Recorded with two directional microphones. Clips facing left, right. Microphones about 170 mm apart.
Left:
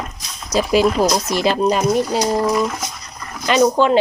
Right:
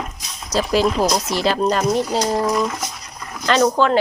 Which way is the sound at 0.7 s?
15° left (ahead or behind).